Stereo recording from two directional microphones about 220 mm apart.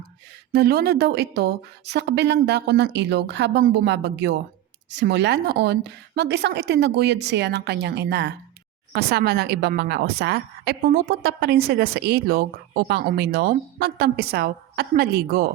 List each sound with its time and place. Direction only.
0.5 s speech: 45° right (ahead or behind)